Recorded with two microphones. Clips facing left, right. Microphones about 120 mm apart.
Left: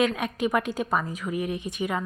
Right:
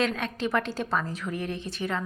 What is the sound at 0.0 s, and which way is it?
Speech, 10° left (ahead or behind).